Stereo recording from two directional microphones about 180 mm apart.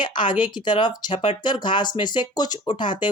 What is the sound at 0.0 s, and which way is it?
Speech, 25° left (ahead or behind).